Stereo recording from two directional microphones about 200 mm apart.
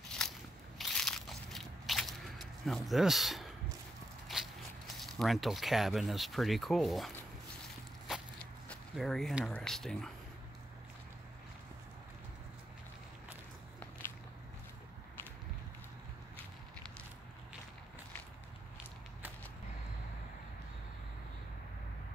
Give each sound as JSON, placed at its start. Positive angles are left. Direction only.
{"t": 0.2, "sound": "crackle", "side_deg": 5}
{"t": 0.7, "sound": "biting", "side_deg": 0}
{"t": 4.3, "sound": "speech", "side_deg": 0}
{"t": 8.6, "sound": "speech", "side_deg": 0}